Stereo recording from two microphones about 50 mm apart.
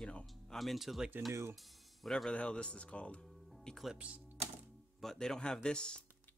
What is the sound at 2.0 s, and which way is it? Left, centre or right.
Speech, centre.